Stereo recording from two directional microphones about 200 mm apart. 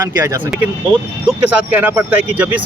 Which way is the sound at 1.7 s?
10° right (ahead or behind).